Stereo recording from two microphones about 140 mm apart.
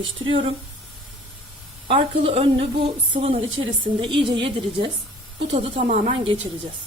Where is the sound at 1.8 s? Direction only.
40° right (ahead or behind).